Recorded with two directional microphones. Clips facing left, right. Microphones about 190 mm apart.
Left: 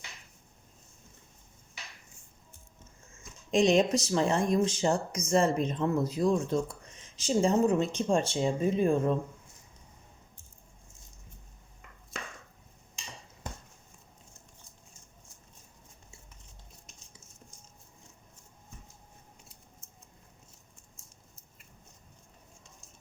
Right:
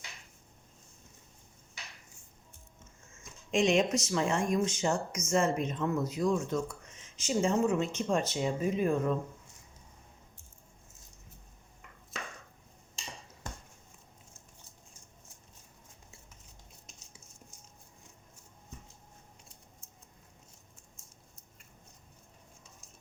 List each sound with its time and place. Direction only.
3.5 s speech: 35° left (ahead or behind)